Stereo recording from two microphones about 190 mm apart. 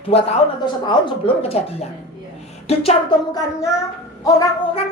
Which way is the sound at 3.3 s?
15° left (ahead or behind).